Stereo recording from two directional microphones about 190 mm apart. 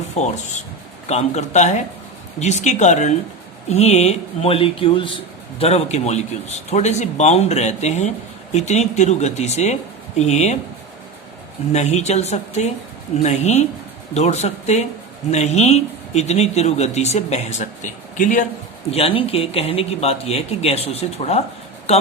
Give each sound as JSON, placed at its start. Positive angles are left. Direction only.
{"t": 0.2, "sound": "a man's voice", "side_deg": 35}
{"t": 11.7, "sound": "a man's voice", "side_deg": 35}
{"t": 18.9, "sound": "a man's voice", "side_deg": 30}